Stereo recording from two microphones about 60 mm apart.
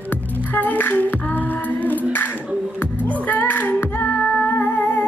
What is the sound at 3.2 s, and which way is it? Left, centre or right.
Music, left.